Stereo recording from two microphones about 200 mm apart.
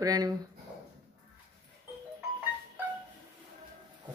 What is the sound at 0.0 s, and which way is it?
Speech, 20° right (ahead or behind).